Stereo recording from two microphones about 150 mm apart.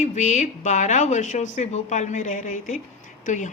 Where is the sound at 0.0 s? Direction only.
50° left (ahead or behind).